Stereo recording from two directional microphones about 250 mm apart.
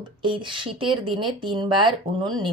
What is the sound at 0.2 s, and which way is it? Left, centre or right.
A woman's voice, centre.